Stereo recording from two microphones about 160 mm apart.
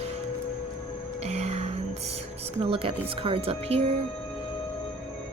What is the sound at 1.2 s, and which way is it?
Music, 40° right (ahead or behind).